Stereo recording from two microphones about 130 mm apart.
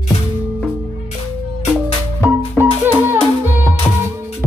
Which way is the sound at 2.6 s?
15° right (ahead or behind).